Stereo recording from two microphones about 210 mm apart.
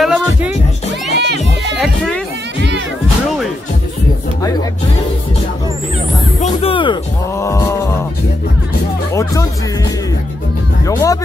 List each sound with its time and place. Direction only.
0.0 s music: centre (ahead or behind)
1.1 s speech: 55° right (ahead or behind)
6.4 s speech: 25° left (ahead or behind)
9.1 s speech: 15° left (ahead or behind)
10.9 s speech: 15° left (ahead or behind)